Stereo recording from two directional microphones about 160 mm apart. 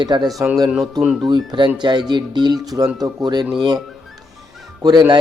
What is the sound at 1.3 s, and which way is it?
Speech, 30° right (ahead or behind).